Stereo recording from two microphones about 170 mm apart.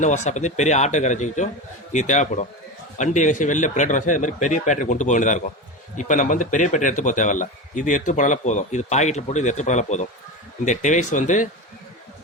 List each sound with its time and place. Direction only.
0.0 s a man's voice: 45° left (ahead or behind)